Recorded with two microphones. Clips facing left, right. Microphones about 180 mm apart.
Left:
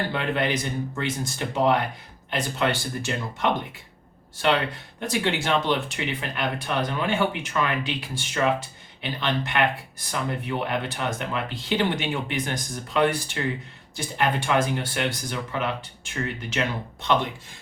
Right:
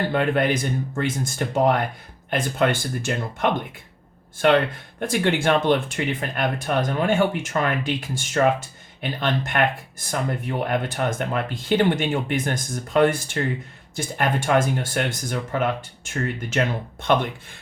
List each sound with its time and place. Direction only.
0.1 s speech: 50° right (ahead or behind)